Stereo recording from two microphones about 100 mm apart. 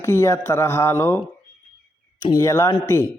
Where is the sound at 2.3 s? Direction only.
30° left (ahead or behind).